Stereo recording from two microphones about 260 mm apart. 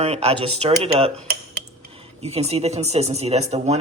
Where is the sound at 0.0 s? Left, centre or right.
Right.